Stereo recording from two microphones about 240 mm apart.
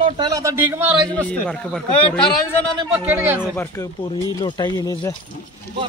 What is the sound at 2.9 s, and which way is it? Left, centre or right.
Speech, centre.